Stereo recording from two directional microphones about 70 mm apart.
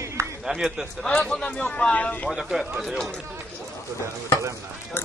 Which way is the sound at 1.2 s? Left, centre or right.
Centre.